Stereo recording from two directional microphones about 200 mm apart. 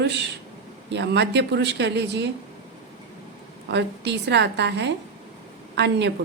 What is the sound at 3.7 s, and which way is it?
Speech, 60° right (ahead or behind).